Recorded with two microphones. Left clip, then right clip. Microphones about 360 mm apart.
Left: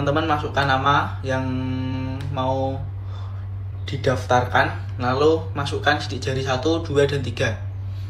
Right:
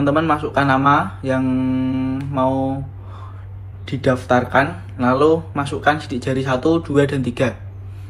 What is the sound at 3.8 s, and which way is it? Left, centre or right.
Speech, centre.